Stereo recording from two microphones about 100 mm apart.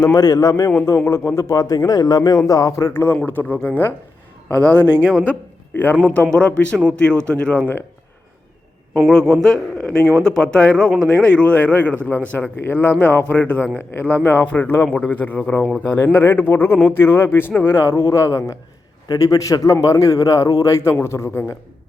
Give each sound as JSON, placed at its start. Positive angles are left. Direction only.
{"t": 0.0, "sound": "a man's voice", "side_deg": 40}
{"t": 9.0, "sound": "a man's voice", "side_deg": 5}